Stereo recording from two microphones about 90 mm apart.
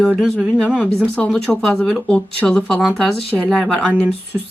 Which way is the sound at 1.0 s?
15° left (ahead or behind).